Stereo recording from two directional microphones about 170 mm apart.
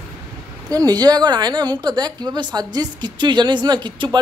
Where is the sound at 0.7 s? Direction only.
25° right (ahead or behind).